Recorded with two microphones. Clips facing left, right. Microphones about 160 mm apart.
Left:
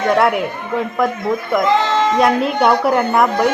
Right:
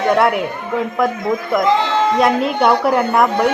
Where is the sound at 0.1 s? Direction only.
Centre (ahead or behind).